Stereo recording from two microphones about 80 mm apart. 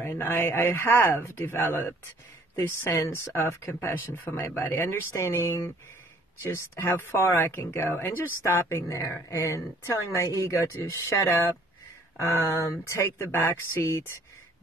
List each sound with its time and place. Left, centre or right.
0.0 s speech: left
12.2 s speech: left